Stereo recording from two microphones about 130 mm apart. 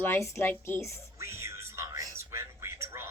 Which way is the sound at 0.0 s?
20° left (ahead or behind).